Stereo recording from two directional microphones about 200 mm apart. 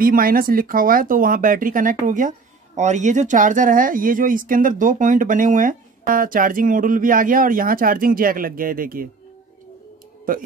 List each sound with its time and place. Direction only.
0.0 s a woman's voice: 45° right (ahead or behind)